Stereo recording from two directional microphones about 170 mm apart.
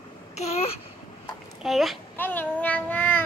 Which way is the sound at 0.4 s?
35° left (ahead or behind).